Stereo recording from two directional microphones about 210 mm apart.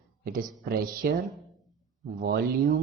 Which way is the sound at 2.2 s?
50° right (ahead or behind).